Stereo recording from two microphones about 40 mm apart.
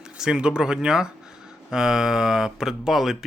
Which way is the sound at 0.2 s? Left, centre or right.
Right.